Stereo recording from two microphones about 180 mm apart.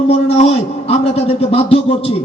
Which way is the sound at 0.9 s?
35° left (ahead or behind).